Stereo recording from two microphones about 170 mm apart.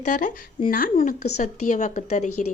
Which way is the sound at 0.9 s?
40° left (ahead or behind).